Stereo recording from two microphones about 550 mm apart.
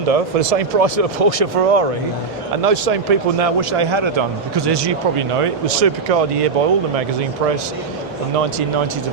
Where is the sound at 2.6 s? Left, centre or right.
Right.